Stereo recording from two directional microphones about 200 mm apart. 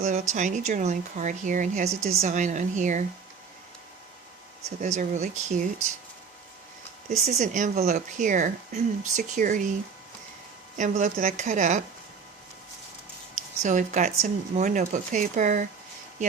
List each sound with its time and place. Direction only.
0.0 s a woman's voice: 40° right (ahead or behind)
4.8 s a woman's voice: 35° right (ahead or behind)
7.3 s a woman's voice: 35° right (ahead or behind)
10.8 s a woman's voice: 40° right (ahead or behind)
13.3 s a woman's voice: 40° right (ahead or behind)